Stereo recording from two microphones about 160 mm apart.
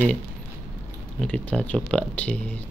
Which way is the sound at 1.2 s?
5° left (ahead or behind).